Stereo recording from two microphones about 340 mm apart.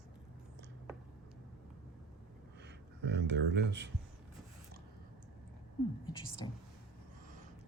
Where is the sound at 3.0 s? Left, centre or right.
Right.